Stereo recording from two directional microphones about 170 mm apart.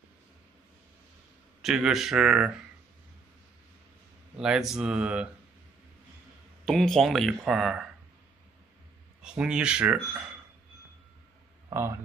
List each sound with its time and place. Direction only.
1.6 s speech: centre (ahead or behind)
4.4 s speech: 5° right (ahead or behind)
6.6 s speech: centre (ahead or behind)
9.2 s speech: 5° right (ahead or behind)